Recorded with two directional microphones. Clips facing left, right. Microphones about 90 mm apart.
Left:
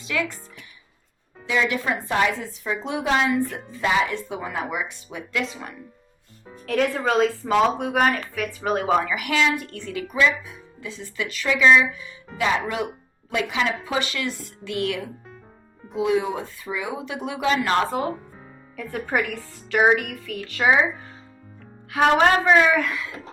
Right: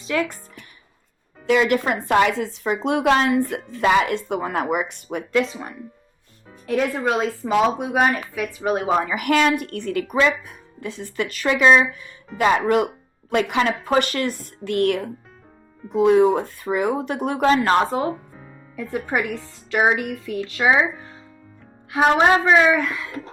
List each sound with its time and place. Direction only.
0.0 s speech: 30° right (ahead or behind)
1.5 s speech: 60° right (ahead or behind)
5.3 s speech: 35° right (ahead or behind)
6.7 s speech: 10° right (ahead or behind)
9.1 s a woman's voice: 50° right (ahead or behind)
18.8 s speech: 15° right (ahead or behind)
21.9 s speech: 15° right (ahead or behind)
22.8 s speech: 30° right (ahead or behind)